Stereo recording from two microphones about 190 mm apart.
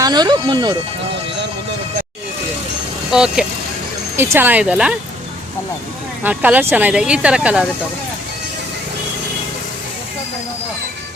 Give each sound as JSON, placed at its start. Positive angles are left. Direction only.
{"t": 0.0, "sound": "speech", "side_deg": -20}
{"t": 3.1, "sound": "speech", "side_deg": -5}
{"t": 6.2, "sound": "speech", "side_deg": -10}